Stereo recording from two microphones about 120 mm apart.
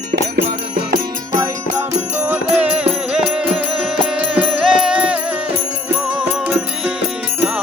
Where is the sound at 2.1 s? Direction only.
20° right (ahead or behind).